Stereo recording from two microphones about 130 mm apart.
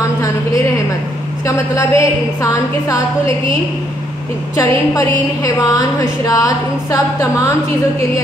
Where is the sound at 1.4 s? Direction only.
25° left (ahead or behind).